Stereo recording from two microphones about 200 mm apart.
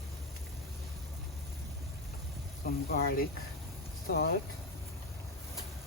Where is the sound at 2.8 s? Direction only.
50° left (ahead or behind).